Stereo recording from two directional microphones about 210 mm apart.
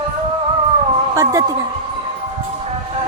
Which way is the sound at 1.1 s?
15° right (ahead or behind).